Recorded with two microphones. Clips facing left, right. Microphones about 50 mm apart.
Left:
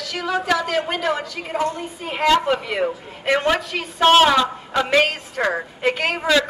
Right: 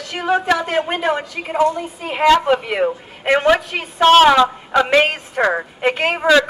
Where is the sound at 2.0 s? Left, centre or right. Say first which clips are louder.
Right 5 dB; centre.